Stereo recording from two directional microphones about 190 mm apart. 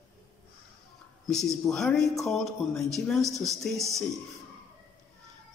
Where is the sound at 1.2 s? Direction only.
Centre (ahead or behind).